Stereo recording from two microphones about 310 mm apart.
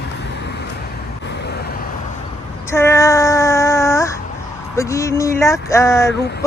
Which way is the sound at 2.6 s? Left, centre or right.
Centre.